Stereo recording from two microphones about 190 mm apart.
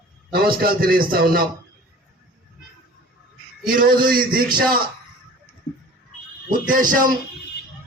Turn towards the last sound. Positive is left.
turn(degrees=-45)  # may be behind; listen again after turning